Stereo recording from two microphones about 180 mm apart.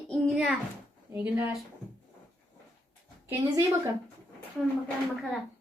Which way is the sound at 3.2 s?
15° right (ahead or behind).